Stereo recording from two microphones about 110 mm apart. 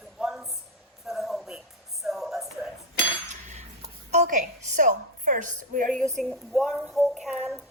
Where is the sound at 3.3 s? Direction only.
90° right.